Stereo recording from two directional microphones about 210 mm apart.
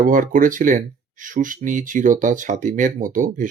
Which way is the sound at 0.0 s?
40° right (ahead or behind).